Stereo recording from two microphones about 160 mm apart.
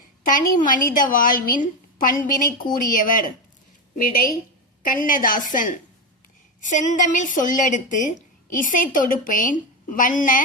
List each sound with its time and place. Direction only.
0.2 s a woman's voice: 55° left (ahead or behind)
4.8 s a woman's voice: 60° left (ahead or behind)